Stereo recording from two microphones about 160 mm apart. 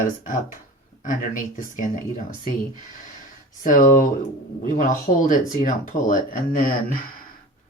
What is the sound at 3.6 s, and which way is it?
Speech, 55° left (ahead or behind).